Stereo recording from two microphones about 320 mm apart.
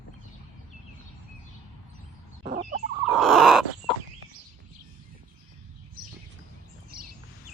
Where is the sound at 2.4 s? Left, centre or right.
Right.